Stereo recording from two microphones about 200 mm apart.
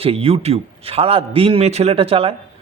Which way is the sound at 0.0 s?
30° right (ahead or behind).